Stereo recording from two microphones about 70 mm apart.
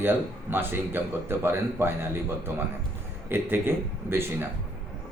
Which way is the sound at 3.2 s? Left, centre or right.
Right.